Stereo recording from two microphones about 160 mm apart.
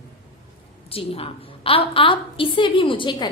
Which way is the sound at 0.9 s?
35° left (ahead or behind).